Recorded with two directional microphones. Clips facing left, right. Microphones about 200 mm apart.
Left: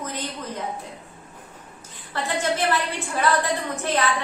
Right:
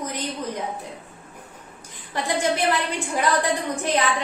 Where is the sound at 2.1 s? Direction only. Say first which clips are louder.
Right 2 dB; 15° right (ahead or behind).